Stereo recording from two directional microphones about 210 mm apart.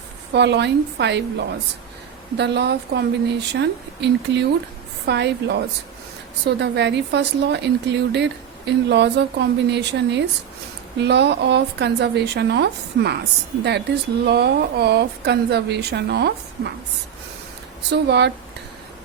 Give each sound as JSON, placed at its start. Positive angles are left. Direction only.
{"t": 0.3, "sound": "speech", "side_deg": -55}
{"t": 17.8, "sound": "speech", "side_deg": -55}